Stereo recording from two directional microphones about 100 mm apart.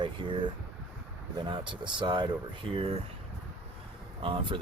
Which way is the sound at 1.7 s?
50° right (ahead or behind).